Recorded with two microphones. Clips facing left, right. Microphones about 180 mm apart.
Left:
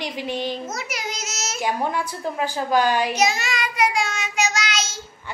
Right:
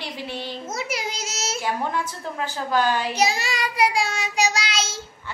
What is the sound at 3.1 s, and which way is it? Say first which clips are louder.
Child singing: left 1 dB; 35° right (ahead or behind).